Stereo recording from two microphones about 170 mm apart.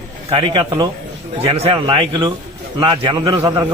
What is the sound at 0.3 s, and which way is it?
A man's voice, 30° right (ahead or behind).